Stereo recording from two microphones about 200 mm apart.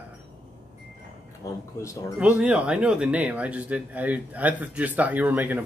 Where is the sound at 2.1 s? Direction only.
5° right (ahead or behind).